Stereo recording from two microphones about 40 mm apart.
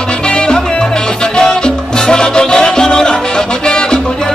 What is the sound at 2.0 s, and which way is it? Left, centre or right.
Music, centre.